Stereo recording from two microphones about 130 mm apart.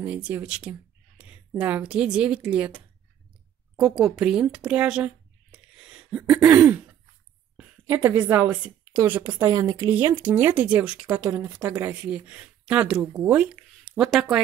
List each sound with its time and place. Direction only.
0.0 s speech: 10° right (ahead or behind)
4.6 s a sound: 10° right (ahead or behind)
7.5 s a woman's voice: 15° right (ahead or behind)